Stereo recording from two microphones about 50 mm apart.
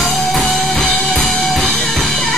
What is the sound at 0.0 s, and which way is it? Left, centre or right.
Music, centre.